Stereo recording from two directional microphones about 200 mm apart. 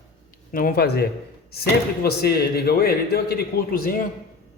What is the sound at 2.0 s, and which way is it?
A man's voice, 55° left (ahead or behind).